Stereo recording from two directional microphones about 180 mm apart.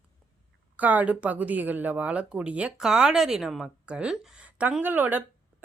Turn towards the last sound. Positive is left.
turn(degrees=-10)  # may be behind; listen again after turning